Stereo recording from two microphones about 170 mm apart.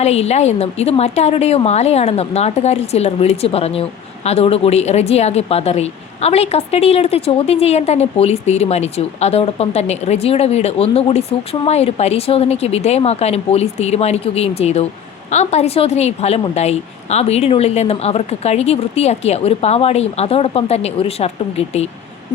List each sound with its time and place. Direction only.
0.0 s a woman's voice: 40° left (ahead or behind)